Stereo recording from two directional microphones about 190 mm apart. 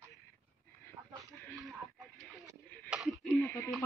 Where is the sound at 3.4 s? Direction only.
10° left (ahead or behind).